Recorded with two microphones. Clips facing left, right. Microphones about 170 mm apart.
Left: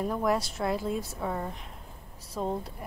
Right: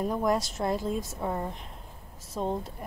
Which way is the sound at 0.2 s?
Centre (ahead or behind).